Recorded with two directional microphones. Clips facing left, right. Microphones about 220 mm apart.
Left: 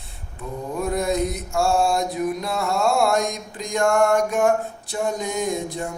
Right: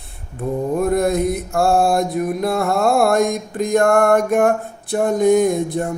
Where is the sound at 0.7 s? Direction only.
55° right (ahead or behind).